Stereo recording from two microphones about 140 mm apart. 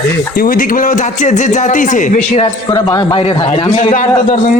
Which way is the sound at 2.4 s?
30° left (ahead or behind).